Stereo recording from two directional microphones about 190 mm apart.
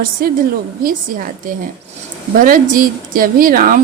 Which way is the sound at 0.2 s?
50° right (ahead or behind).